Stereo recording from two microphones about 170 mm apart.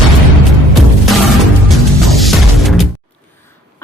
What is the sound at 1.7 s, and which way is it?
Music, centre (ahead or behind).